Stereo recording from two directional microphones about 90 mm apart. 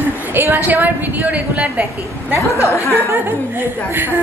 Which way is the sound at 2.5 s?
35° left (ahead or behind).